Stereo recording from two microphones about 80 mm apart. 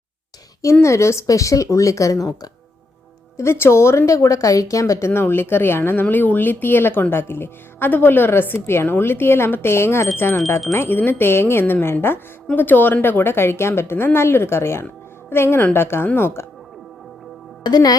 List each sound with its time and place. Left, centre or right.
0.6 s speech: left
3.3 s a woman's voice: left
17.6 s speech: left